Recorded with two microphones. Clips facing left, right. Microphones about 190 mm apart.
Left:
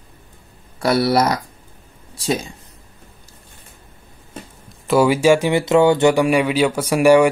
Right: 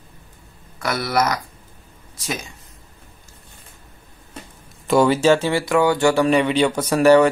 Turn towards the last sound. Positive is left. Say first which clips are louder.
# left 1 dB
turn(degrees=10)  # may be behind; listen again after turning